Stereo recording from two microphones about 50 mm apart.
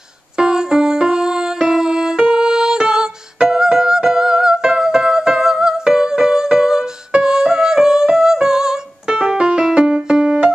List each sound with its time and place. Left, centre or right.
0.4 s music: centre